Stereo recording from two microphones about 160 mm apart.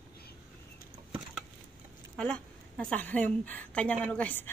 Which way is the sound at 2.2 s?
5° left (ahead or behind).